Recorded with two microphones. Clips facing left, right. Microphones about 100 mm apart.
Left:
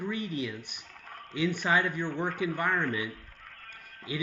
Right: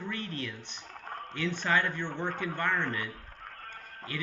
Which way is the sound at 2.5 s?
10° left (ahead or behind).